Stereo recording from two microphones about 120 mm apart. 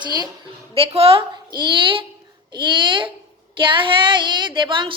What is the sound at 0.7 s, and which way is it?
Speech, 55° right (ahead or behind).